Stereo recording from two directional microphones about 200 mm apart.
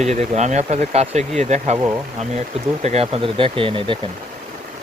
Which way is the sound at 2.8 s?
30° right (ahead or behind).